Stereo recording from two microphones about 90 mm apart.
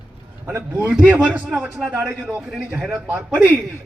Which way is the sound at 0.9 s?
15° right (ahead or behind).